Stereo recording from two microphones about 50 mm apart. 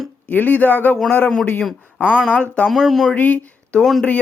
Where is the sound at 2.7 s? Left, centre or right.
Centre.